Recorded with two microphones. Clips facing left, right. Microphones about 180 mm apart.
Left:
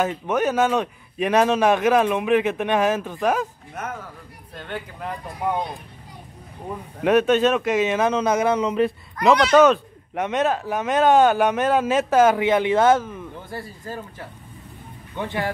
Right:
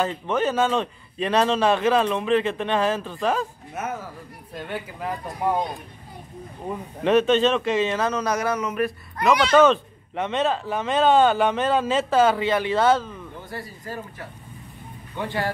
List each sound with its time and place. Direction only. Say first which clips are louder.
0.3 s speech: left 2 dB; 15° left (ahead or behind)
3.8 s speech: right 2 dB; 5° right (ahead or behind)
7.0 s speech: left 1 dB; 10° left (ahead or behind)
9.5 s speech: left 2 dB; 10° left (ahead or behind)